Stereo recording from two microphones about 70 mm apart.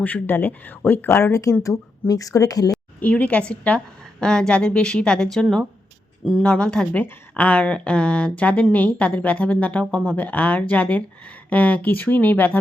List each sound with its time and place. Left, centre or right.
0.0 s speech: left
1.2 s speech: left
1.6 s speech: left
3.0 s speech: centre
6.9 s speech: left